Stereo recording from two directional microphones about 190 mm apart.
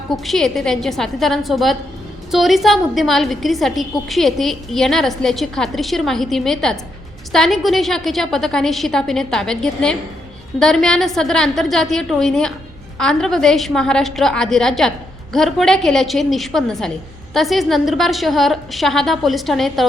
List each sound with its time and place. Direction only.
0.1 s a woman's voice: centre (ahead or behind)